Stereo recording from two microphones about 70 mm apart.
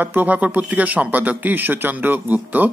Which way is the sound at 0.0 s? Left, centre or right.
Right.